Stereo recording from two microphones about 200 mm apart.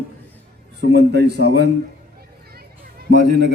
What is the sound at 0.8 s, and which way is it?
Speech, 55° right (ahead or behind).